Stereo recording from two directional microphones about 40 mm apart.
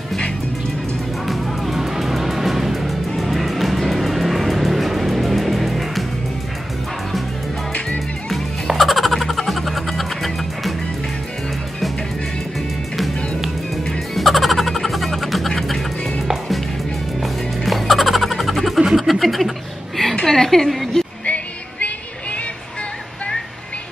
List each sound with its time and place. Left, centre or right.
1.2 s music: centre
3.2 s vehicle: centre
8.3 s music: centre
14.1 s music: centre
17.2 s music: centre
18.9 s a sound: centre
21.3 s music: left